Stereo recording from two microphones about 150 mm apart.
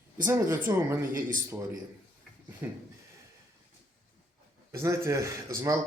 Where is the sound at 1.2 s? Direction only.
65° right (ahead or behind).